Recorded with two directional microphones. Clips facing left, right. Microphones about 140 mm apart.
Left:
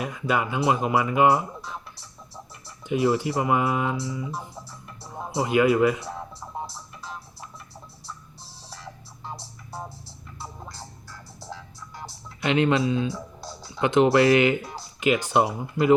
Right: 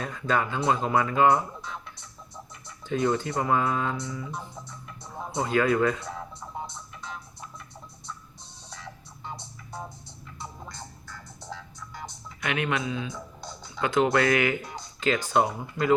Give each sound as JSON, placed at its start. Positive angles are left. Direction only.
{"t": 0.0, "sound": "a sound", "side_deg": 10}
{"t": 2.8, "sound": "speech", "side_deg": 10}
{"t": 5.0, "sound": "music", "side_deg": 5}
{"t": 8.0, "sound": "music", "side_deg": 5}
{"t": 12.4, "sound": "speech", "side_deg": 25}
{"t": 13.1, "sound": "music", "side_deg": 5}
{"t": 13.8, "sound": "speech", "side_deg": 25}